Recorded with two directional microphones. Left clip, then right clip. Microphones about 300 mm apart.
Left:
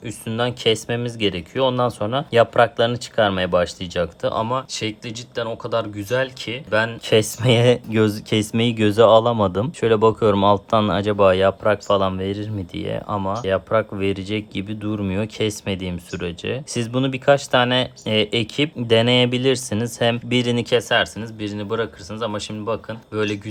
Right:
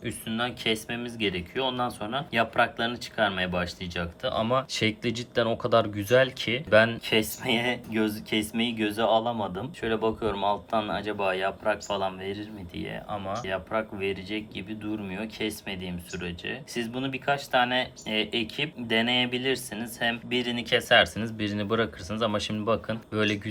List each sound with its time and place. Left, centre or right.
0.0 s speech: centre
7.0 s speech: centre